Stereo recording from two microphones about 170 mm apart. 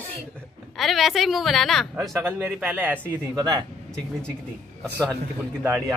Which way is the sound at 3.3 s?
25° right (ahead or behind).